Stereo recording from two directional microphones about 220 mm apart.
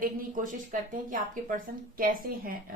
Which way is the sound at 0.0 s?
40° right (ahead or behind).